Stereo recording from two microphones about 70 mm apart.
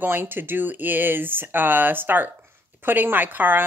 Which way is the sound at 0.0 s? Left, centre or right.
Right.